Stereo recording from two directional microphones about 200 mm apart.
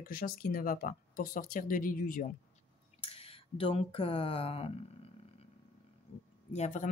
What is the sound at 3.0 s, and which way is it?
Speech, 30° left (ahead or behind).